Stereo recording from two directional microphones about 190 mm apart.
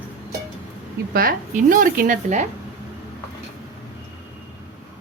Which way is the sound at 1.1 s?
50° right (ahead or behind).